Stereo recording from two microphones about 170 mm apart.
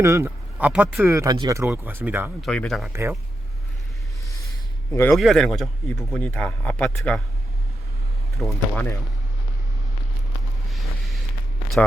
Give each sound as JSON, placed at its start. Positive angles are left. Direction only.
{"t": 0.0, "sound": "speech", "side_deg": -15}
{"t": 1.1, "sound": "speech", "side_deg": -20}
{"t": 2.4, "sound": "a man's voice", "side_deg": 5}
{"t": 2.9, "sound": "speech", "side_deg": -15}
{"t": 4.9, "sound": "a man's voice", "side_deg": 15}
{"t": 5.1, "sound": "a man's voice", "side_deg": 0}
{"t": 8.4, "sound": "a man's voice", "side_deg": 5}
{"t": 10.7, "sound": "vehicle", "side_deg": 0}
{"t": 11.8, "sound": "a man's voice", "side_deg": 5}